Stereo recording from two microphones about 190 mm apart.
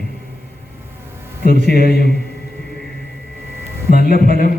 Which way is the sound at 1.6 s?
55° left (ahead or behind).